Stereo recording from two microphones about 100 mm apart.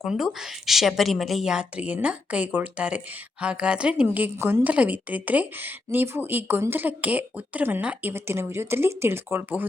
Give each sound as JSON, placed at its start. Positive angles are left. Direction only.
{"t": 0.0, "sound": "a woman's voice", "side_deg": 0}